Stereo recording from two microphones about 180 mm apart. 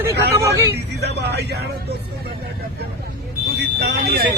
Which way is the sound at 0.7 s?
65° right (ahead or behind).